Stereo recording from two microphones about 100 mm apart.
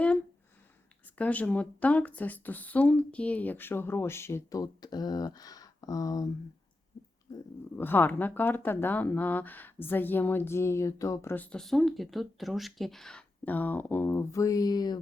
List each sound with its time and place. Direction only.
1.2 s speech: 15° left (ahead or behind); by 6.3 s 40° left (ahead or behind)
7.8 s speech: 20° left (ahead or behind)
11.3 s speech: 15° left (ahead or behind)
11.6 s speech: 5° left (ahead or behind)
13.4 s speech: 15° left (ahead or behind); by 14.9 s 40° left (ahead or behind)